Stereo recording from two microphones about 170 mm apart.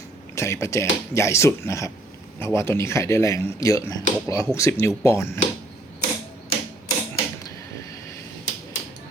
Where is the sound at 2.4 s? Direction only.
15° left (ahead or behind).